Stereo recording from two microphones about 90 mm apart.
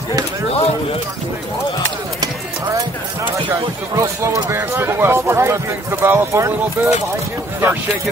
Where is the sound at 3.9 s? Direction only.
35° right (ahead or behind).